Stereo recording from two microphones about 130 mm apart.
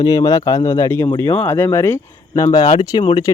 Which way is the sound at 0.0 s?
25° left (ahead or behind).